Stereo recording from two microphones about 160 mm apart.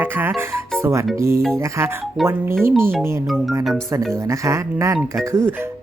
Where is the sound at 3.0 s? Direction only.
15° right (ahead or behind).